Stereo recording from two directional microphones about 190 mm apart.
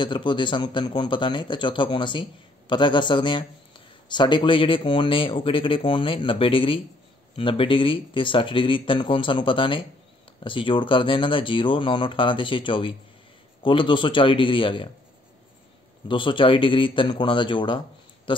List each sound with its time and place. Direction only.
0.0 s a man's voice: 25° left (ahead or behind)
16.1 s a man's voice: 25° left (ahead or behind)